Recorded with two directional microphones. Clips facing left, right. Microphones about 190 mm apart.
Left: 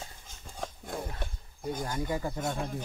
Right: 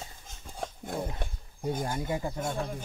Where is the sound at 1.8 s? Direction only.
20° right (ahead or behind).